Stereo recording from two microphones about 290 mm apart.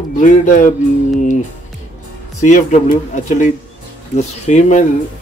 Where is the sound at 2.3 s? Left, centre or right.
Left.